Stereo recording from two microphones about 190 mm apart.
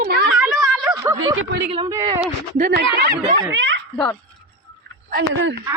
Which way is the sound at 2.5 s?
50° right (ahead or behind).